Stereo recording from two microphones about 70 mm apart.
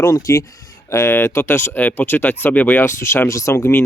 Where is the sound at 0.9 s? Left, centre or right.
Left.